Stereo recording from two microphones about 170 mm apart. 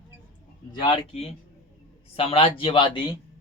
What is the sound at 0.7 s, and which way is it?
Speech, 30° left (ahead or behind).